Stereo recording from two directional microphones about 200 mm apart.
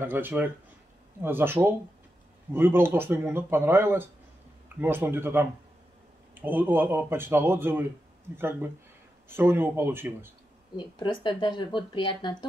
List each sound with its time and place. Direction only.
0.0 s speech: 10° right (ahead or behind)
10.8 s speech: 25° left (ahead or behind)